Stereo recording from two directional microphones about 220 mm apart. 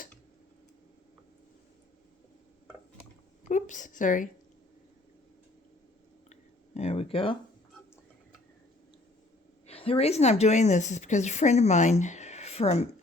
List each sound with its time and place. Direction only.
3.5 s a woman's voice: 35° left (ahead or behind)
6.7 s a sound: 30° left (ahead or behind)
9.6 s a woman's voice: 25° left (ahead or behind)